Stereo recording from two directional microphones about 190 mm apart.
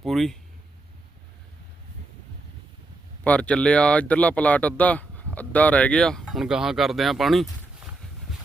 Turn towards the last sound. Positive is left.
turn(degrees=0)  # may be behind; listen again after turning